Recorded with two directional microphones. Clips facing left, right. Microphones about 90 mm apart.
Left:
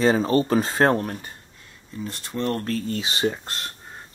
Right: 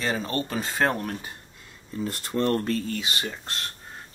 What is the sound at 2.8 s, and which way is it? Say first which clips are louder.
Speech: left 6 dB; 30° left (ahead or behind).